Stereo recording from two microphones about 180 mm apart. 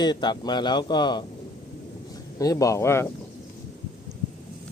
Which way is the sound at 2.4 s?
20° left (ahead or behind).